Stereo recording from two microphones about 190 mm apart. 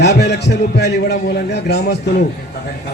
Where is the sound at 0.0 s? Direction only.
60° left (ahead or behind).